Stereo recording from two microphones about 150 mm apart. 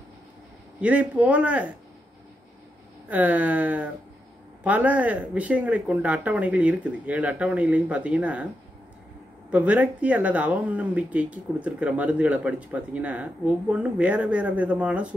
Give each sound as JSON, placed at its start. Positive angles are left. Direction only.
{"t": 0.7, "sound": "speech", "side_deg": -10}
{"t": 3.1, "sound": "speech", "side_deg": -10}
{"t": 9.5, "sound": "speech", "side_deg": -10}